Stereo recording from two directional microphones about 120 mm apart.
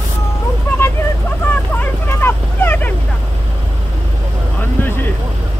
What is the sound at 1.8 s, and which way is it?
Vehicle, 20° left (ahead or behind).